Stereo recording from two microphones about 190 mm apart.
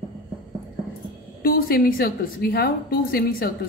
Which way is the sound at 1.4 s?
50° left (ahead or behind).